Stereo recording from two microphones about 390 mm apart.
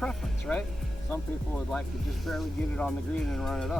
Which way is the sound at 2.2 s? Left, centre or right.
Centre.